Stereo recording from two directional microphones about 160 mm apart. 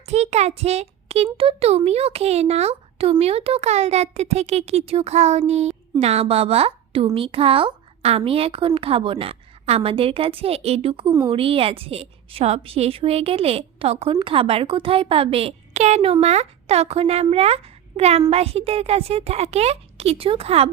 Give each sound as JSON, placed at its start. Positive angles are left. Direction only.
{"t": 0.0, "sound": "a child's voice", "side_deg": -40}